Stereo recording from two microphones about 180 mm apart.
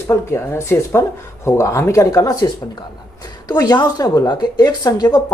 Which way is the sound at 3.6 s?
20° left (ahead or behind).